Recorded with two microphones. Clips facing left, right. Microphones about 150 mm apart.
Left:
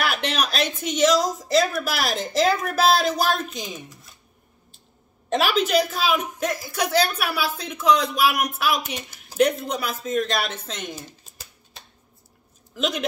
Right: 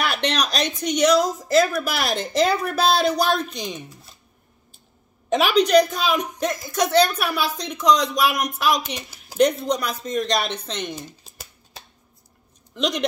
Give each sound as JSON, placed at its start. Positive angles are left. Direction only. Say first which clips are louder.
{"t": 0.0, "sound": "a woman's voice", "louder": "right 1 dB", "side_deg": 5}
{"t": 5.3, "sound": "a woman's voice", "louder": "right 4 dB", "side_deg": 0}
{"t": 12.7, "sound": "speech", "louder": "right 1 dB", "side_deg": 5}